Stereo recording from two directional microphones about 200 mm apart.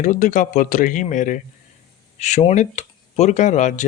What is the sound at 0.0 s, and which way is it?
Speech, 40° left (ahead or behind).